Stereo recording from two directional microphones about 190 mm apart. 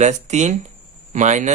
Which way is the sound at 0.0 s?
40° right (ahead or behind).